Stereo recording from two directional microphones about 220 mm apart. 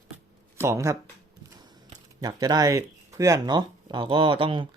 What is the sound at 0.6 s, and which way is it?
Speech, 15° right (ahead or behind).